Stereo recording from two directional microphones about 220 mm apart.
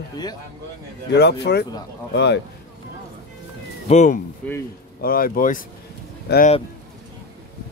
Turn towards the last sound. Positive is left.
turn(degrees=50)  # may be behind; listen again after turning